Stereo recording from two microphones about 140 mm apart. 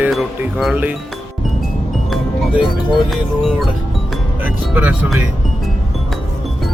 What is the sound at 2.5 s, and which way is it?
Speech, 35° left (ahead or behind).